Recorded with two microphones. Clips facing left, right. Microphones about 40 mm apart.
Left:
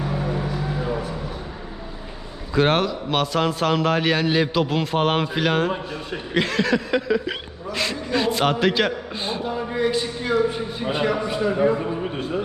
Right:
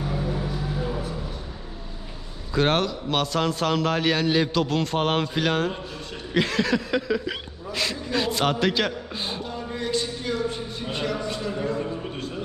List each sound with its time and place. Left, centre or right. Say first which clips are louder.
0.0 s vehicle: left 3 dB; centre
2.5 s a man's voice: left 3 dB; centre
9.5 s a man's voice: left 7 dB; centre